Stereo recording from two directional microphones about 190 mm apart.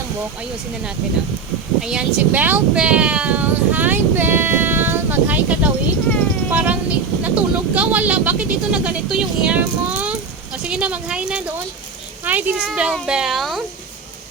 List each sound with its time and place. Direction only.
1.8 s speech: 5° right (ahead or behind)